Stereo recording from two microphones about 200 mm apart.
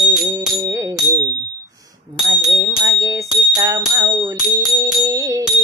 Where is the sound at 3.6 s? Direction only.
15° right (ahead or behind).